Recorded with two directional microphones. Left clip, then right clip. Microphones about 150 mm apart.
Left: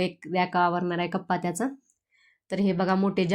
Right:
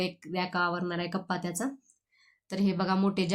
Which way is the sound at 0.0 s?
20° left (ahead or behind).